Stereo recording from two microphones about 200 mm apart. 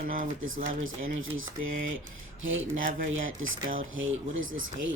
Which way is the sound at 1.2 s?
80° right.